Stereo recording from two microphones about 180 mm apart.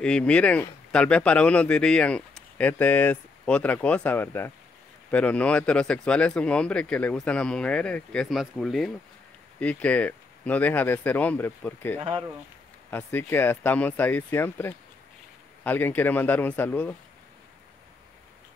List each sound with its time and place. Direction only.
0.0 s speech: 5° left (ahead or behind)
12.0 s speech: 30° right (ahead or behind)
12.9 s speech: 10° left (ahead or behind)